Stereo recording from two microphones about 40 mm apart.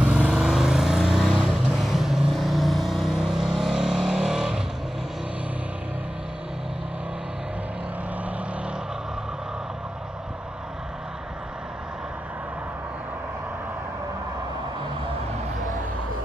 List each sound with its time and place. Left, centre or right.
0.0 s vehicle: right; by 3.2 s centre
3.2 s vehicle: centre